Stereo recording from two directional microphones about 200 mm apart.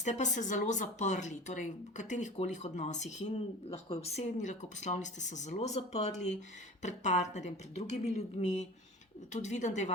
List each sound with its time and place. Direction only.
0.0 s speech: 35° left (ahead or behind)